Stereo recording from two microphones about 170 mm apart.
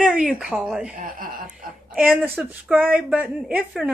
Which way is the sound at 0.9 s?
55° right (ahead or behind).